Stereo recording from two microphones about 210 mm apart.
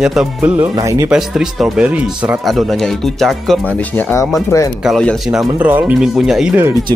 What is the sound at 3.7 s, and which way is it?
Speech, 10° left (ahead or behind).